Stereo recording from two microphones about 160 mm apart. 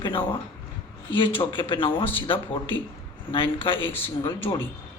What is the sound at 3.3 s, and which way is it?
Speech, 35° left (ahead or behind).